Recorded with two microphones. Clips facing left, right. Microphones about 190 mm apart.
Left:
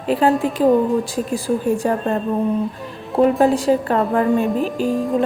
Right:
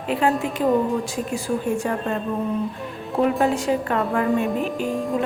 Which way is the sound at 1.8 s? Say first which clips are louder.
Left 5 dB; 40° left (ahead or behind).